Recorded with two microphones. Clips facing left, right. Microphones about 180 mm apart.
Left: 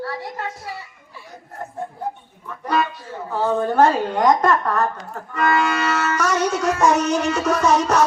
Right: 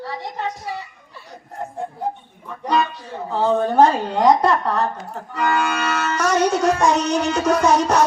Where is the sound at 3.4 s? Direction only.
15° right (ahead or behind).